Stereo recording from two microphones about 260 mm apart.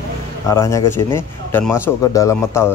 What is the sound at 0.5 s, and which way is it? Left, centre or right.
Speech, centre.